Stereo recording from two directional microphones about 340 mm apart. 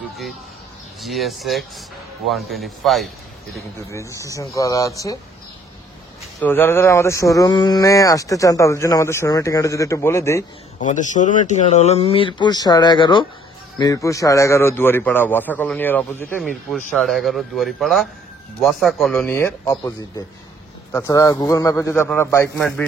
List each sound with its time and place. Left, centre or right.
1.0 s a man's voice: centre
6.4 s speech: centre
10.8 s a man's voice: left; by 22.8 s centre